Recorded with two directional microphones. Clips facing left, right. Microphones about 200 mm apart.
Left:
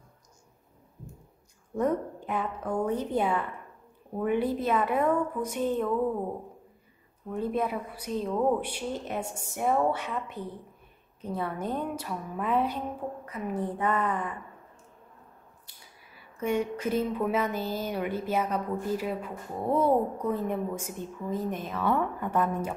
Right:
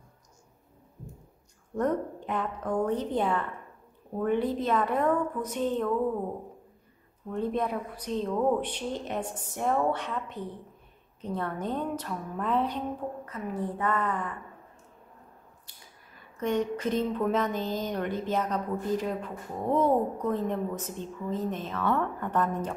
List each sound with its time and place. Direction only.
1.8 s speech: 10° left (ahead or behind)
7.3 s speech: 5° left (ahead or behind)
16.2 s speech: 10° left (ahead or behind)